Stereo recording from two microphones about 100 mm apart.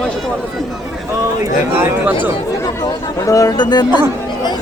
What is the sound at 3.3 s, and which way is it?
Speech, 35° left (ahead or behind).